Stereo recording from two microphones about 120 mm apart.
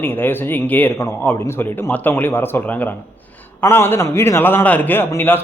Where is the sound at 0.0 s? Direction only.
20° left (ahead or behind).